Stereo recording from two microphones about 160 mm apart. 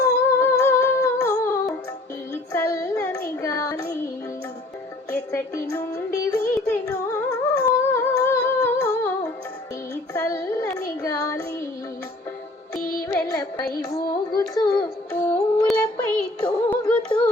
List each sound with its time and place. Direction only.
0.0 s humming: 15° left (ahead or behind)
2.3 s child singing: 20° left (ahead or behind)
5.1 s music: 20° left (ahead or behind)
7.5 s humming: 15° left (ahead or behind)
9.9 s child singing: 20° left (ahead or behind)
12.8 s music: 65° left (ahead or behind)
13.1 s music: 25° left (ahead or behind)
13.9 s carnatic music: 25° left (ahead or behind)
15.6 s child singing: 5° left (ahead or behind)
16.6 s music: 10° left (ahead or behind)